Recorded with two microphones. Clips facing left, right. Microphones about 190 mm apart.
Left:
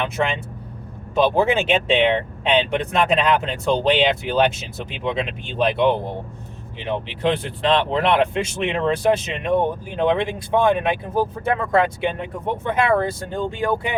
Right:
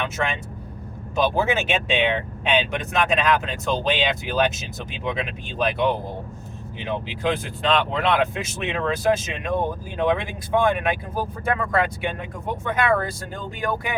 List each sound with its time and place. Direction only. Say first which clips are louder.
1.2 s speech: left 4 dB; 30° left (ahead or behind)